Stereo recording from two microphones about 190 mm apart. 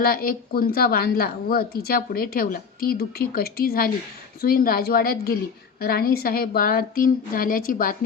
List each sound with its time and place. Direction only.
0.0 s a woman's voice: 50° left (ahead or behind)